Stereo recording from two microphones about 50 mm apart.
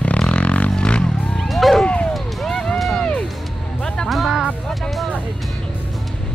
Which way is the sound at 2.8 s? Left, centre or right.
Centre.